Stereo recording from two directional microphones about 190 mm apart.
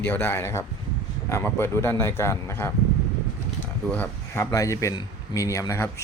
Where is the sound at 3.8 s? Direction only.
10° left (ahead or behind).